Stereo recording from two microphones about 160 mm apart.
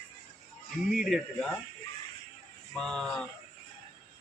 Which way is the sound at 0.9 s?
Centre (ahead or behind).